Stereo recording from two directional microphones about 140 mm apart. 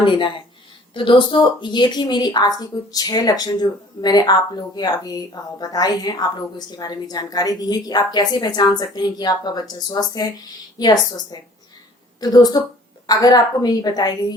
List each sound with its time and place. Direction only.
0.0 s a woman's voice: 35° left (ahead or behind)